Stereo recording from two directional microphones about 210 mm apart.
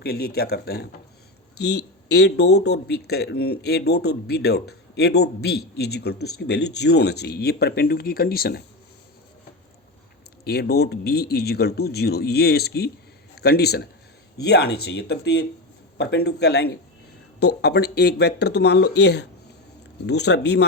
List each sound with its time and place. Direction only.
0.0 s speech: 50° left (ahead or behind)
10.4 s a man's voice: 50° left (ahead or behind)